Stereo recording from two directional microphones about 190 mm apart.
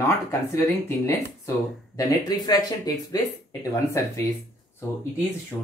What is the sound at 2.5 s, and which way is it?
Speech, 20° left (ahead or behind).